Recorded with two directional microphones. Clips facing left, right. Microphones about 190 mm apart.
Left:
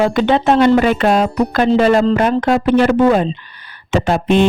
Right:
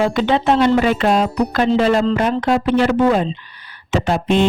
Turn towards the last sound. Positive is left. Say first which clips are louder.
# left 3 dB
turn(degrees=55)  # may be behind; listen again after turning